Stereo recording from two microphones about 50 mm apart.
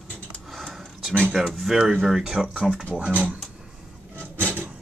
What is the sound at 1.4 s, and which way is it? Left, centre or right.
Speech, centre.